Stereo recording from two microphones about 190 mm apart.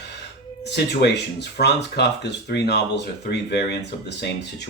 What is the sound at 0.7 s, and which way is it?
Speech, 60° left (ahead or behind).